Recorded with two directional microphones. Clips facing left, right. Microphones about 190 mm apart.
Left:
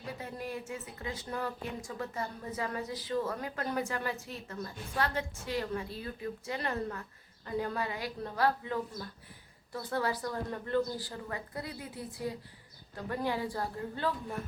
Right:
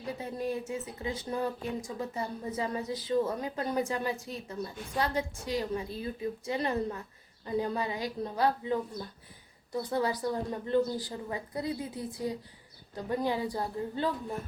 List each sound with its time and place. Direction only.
0.2 s a woman's voice: 25° right (ahead or behind)